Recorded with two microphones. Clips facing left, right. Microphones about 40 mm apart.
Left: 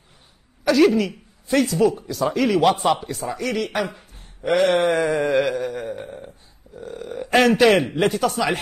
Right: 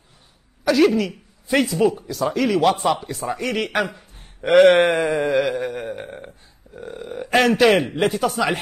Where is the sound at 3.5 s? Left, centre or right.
Right.